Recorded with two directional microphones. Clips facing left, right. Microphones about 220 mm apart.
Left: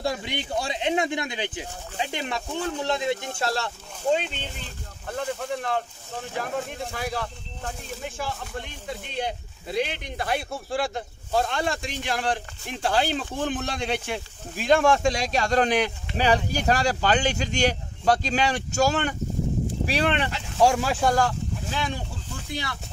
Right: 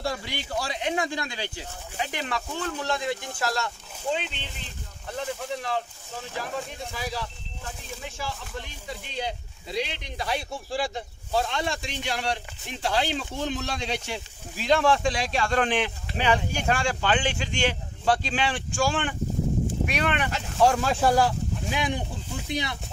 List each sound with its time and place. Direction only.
0.0 s speech: 20° left (ahead or behind)
5.1 s speech: 55° left (ahead or behind)
19.9 s speech: 30° left (ahead or behind)
20.6 s speech: 5° left (ahead or behind)
21.0 s speech: 10° right (ahead or behind)